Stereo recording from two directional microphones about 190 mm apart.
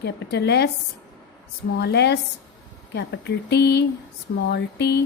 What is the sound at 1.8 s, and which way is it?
Speech, 60° left (ahead or behind).